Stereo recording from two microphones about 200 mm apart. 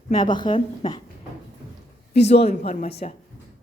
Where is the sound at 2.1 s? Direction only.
30° left (ahead or behind).